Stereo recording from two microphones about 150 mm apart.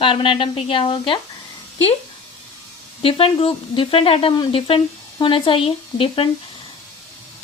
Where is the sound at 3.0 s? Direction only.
40° left (ahead or behind).